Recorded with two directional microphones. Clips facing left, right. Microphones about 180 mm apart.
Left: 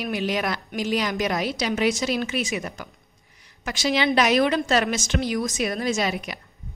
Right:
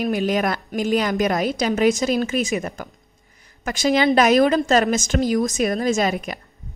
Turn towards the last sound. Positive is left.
turn(degrees=-45)  # may be behind; listen again after turning